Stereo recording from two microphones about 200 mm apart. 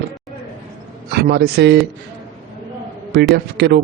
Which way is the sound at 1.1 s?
55° right (ahead or behind).